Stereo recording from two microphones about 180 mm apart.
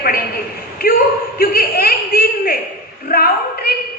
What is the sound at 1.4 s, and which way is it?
A man's voice, 55° left (ahead or behind).